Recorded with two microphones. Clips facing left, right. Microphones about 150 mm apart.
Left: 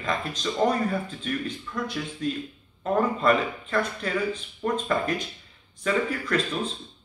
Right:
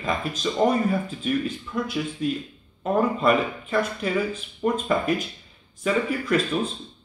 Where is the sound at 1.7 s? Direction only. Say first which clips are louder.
Right 4 dB; 20° right (ahead or behind).